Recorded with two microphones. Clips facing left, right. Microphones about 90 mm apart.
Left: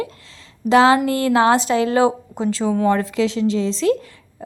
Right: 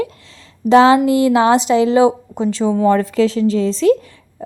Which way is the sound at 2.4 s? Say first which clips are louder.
Right 3 dB; 35° left (ahead or behind).